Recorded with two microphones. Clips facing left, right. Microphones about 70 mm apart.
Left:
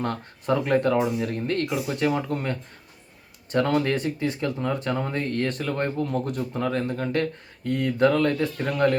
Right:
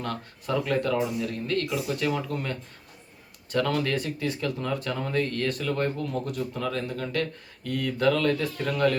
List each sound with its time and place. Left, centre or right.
0.0 s speech: left